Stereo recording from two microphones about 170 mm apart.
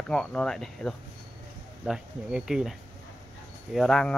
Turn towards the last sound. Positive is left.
turn(degrees=5)  # may be behind; listen again after turning